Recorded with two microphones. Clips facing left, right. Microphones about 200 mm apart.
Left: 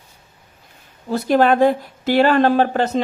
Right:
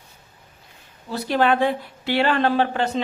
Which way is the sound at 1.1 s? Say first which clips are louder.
Left 5 dB; 45° left (ahead or behind).